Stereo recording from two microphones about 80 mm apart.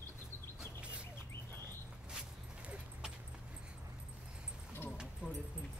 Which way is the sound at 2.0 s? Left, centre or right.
Centre.